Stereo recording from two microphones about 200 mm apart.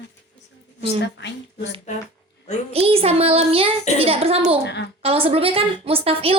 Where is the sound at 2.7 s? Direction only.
30° right (ahead or behind).